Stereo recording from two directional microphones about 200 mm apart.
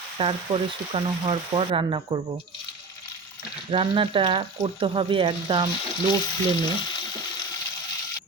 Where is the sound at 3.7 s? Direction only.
25° right (ahead or behind).